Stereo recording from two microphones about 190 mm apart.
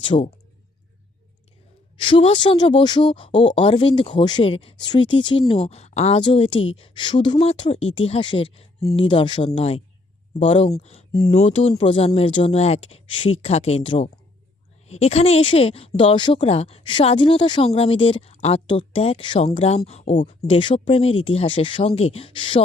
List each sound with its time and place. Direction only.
0.1 s speech: 35° left (ahead or behind)
2.0 s speech: 25° left (ahead or behind)